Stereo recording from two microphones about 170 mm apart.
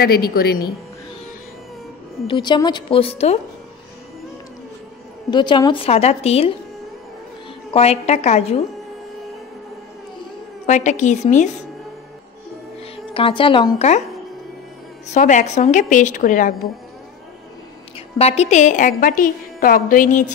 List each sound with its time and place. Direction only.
0.0 s a woman's voice: 60° left (ahead or behind)
2.2 s a woman's voice: 30° left (ahead or behind)
5.3 s a woman's voice: 25° left (ahead or behind)
7.7 s a woman's voice: 35° left (ahead or behind)
10.7 s a woman's voice: 45° left (ahead or behind)
12.9 s a woman's voice: 30° left (ahead or behind)
15.0 s a woman's voice: 45° left (ahead or behind)
17.9 s a woman's voice: 35° left (ahead or behind)